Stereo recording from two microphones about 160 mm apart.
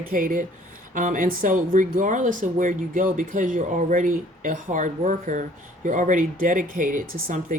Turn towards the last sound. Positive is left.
turn(degrees=-60)  # may be behind; listen again after turning